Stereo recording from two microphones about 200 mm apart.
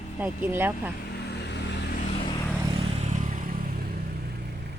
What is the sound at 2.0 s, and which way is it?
Vehicle, 30° left (ahead or behind).